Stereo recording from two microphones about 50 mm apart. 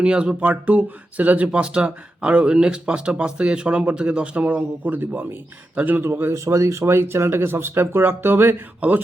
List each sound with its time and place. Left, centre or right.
0.0 s speech: centre
0.5 s speech: right
4.4 s speech: right
6.3 s speech: right